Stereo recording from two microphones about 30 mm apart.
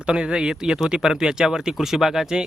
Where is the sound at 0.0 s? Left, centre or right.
Right; by 2.2 s centre.